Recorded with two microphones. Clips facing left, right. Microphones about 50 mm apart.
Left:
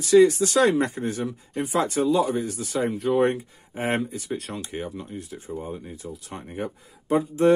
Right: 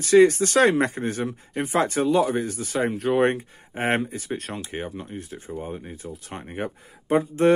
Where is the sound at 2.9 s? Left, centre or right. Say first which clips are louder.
Even; right.